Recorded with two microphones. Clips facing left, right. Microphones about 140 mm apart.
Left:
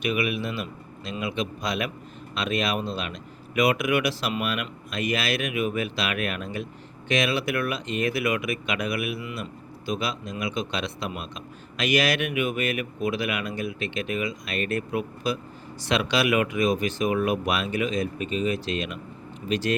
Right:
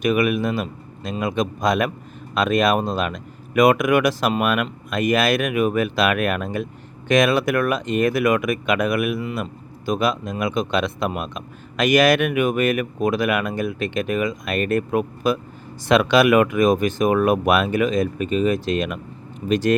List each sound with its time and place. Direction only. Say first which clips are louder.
0.0 s speech: right 7 dB; 45° right (ahead or behind)